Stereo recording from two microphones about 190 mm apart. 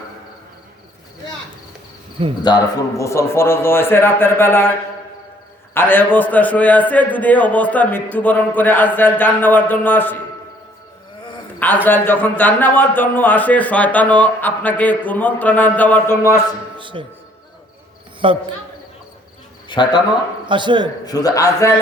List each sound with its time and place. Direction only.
2.2 s a man's voice: 30° right (ahead or behind)
3.0 s a man's voice: 15° left (ahead or behind)
5.7 s a man's voice: 10° left (ahead or behind)
11.9 s a man's voice: 10° left (ahead or behind)
16.7 s speech: 25° right (ahead or behind)
18.2 s a man's voice: 25° right (ahead or behind)
19.6 s speech: 25° left (ahead or behind)
20.5 s a man's voice: 25° right (ahead or behind)
21.0 s a man's voice: 20° left (ahead or behind)